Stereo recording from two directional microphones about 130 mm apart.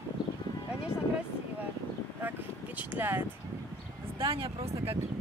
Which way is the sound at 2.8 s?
15° right (ahead or behind).